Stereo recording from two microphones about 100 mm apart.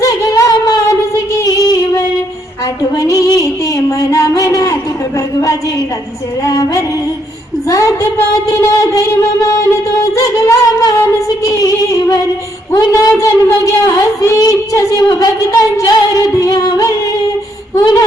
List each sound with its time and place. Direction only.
0.0 s a sound: 35° left (ahead or behind)
1.5 s music: 35° left (ahead or behind)
2.9 s a sound: 35° left (ahead or behind)
6.4 s a woman's voice: 35° left (ahead or behind)
10.2 s music: 30° left (ahead or behind)
12.7 s a woman's voice: 35° left (ahead or behind)